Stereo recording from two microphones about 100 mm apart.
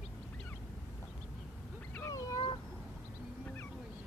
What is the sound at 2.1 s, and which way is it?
Cat, 35° left (ahead or behind).